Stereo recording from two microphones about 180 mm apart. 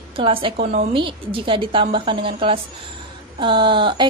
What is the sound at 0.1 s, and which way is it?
A woman's voice, 30° right (ahead or behind).